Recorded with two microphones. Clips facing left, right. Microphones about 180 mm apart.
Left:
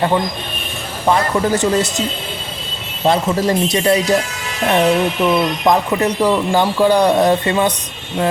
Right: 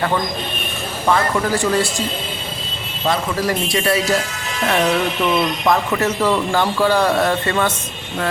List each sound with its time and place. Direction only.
1.0 s speech: 20° left (ahead or behind)